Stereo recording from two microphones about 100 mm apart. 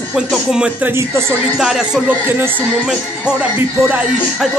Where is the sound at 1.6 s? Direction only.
5° right (ahead or behind).